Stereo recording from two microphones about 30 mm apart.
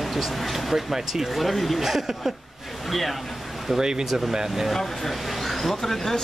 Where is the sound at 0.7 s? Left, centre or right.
Centre.